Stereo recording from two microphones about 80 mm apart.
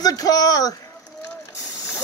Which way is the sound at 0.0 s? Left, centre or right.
Left.